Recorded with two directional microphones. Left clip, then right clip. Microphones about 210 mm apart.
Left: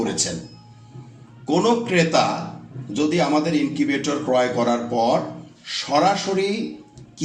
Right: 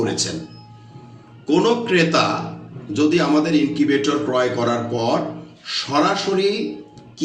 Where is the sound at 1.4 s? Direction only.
50° left (ahead or behind).